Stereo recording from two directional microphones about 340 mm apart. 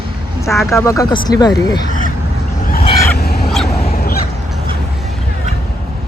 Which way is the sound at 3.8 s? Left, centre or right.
Left.